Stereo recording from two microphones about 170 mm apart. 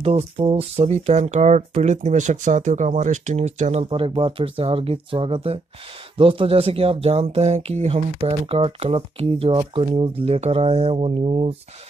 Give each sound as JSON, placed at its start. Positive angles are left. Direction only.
{"t": 0.0, "sound": "speech", "side_deg": -35}
{"t": 3.9, "sound": "speech", "side_deg": -30}